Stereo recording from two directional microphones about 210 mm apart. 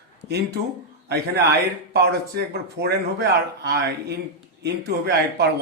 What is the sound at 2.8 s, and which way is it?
Speech, 50° right (ahead or behind).